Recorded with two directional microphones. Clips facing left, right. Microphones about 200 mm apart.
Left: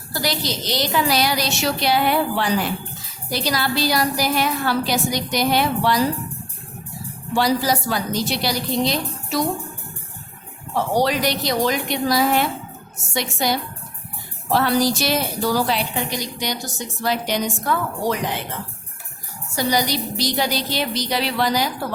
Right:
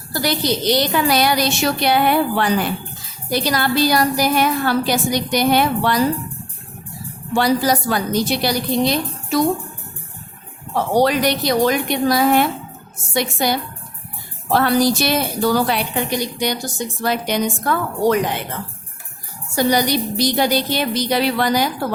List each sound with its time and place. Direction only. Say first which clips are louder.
0.1 s a woman's voice: right 5 dB; 55° right (ahead or behind)
7.3 s a woman's voice: right 3 dB; 55° right (ahead or behind)
11.0 s a woman's voice: right 4 dB; 55° right (ahead or behind)
19.5 s a woman's voice: right 4 dB; 55° right (ahead or behind)